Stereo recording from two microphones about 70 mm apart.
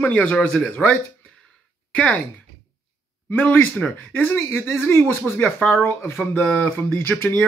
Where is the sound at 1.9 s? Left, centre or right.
Centre.